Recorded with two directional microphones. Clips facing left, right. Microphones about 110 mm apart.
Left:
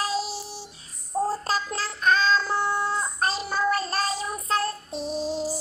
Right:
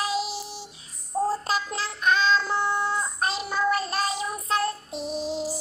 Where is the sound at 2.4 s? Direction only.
5° left (ahead or behind).